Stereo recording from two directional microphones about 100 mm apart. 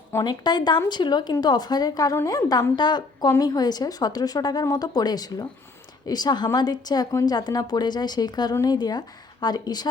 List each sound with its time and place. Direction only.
0.3 s a woman's voice: 45° left (ahead or behind)